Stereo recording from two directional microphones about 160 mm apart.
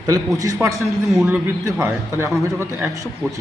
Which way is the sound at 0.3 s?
20° right (ahead or behind).